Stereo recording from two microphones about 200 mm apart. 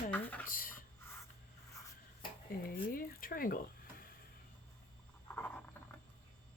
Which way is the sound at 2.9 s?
45° left (ahead or behind).